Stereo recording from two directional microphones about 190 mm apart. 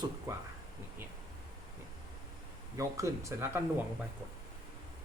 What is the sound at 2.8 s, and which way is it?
Speech, 15° right (ahead or behind).